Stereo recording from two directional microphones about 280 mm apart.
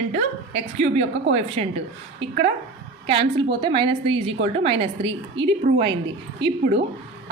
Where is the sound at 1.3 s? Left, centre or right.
Right.